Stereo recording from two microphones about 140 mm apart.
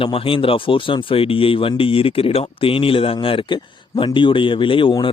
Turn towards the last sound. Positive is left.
turn(degrees=35)  # may be behind; listen again after turning